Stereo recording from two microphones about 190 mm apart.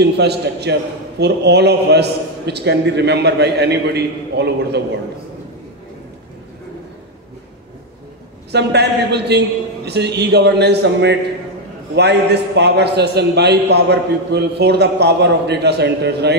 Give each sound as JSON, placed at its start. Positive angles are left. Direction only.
{"t": 0.0, "sound": "a man's voice", "side_deg": -60}
{"t": 8.5, "sound": "a man's voice", "side_deg": -60}